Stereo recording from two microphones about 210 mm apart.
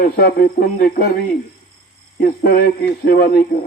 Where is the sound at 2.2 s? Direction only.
50° left (ahead or behind).